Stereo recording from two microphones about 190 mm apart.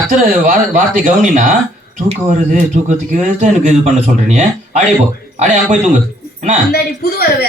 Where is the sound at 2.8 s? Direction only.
40° right (ahead or behind).